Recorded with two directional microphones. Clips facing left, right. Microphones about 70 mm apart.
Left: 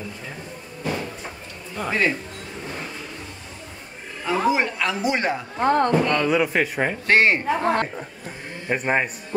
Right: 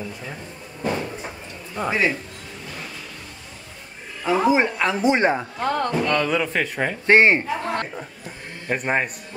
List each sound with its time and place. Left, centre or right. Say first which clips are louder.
1.8 s speech: right 1 dB; centre
4.2 s speech: right 3 dB; centre
5.6 s a woman's voice: left 4 dB; left
5.9 s speech: left 1 dB; centre
7.1 s a man's voice: right 3 dB; right
7.4 s a woman's voice: left 4 dB; left
8.6 s a man's voice: left 1 dB; centre